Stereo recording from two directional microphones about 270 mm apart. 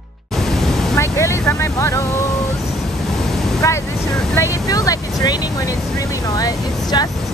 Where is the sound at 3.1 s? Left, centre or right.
Centre.